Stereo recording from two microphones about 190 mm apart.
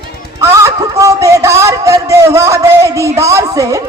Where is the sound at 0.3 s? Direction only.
15° right (ahead or behind).